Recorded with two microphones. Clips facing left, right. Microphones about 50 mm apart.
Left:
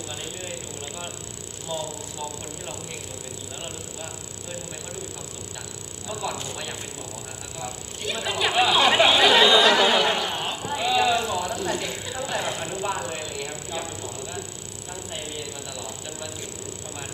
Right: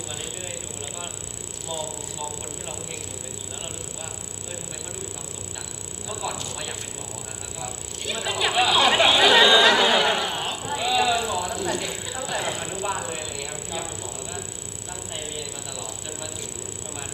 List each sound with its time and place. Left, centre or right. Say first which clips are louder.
1.7 s speech: left 1 dB; centre
6.1 s speech: left 1 dB; centre
8.0 s chatter: even; centre
15.4 s mechanisms: even; centre